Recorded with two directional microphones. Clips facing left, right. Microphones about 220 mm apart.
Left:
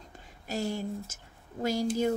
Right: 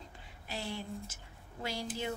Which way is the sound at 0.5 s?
45° left (ahead or behind).